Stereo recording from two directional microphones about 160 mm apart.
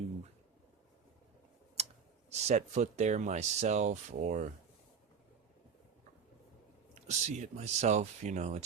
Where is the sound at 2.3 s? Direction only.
45° right (ahead or behind).